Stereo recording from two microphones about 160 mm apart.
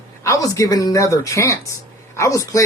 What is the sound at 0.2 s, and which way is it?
Speech, 20° left (ahead or behind).